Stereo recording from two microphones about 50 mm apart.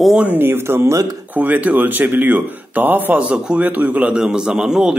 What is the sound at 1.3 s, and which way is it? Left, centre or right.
Speech, right.